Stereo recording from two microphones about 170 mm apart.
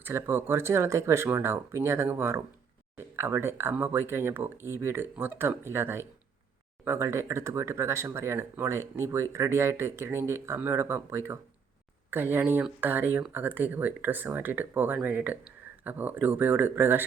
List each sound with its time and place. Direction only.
0.0 s speech: 15° right (ahead or behind)